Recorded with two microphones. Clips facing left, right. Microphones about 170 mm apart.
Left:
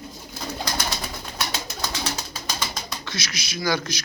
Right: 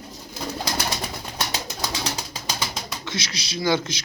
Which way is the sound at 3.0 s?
25° right (ahead or behind).